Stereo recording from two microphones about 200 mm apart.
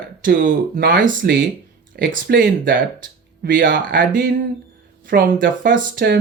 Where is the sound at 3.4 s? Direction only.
45° right (ahead or behind).